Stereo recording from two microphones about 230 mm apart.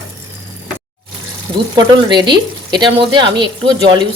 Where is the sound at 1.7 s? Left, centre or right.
Centre.